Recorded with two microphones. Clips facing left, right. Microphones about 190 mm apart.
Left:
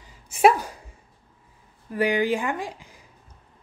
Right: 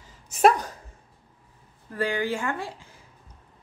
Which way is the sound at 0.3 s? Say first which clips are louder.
Left 1 dB; 10° left (ahead or behind).